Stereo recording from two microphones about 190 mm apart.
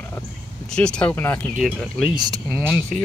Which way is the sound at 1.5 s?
5° right (ahead or behind).